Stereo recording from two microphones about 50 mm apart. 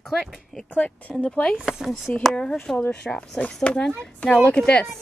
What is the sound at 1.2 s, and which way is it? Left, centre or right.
Speech, centre.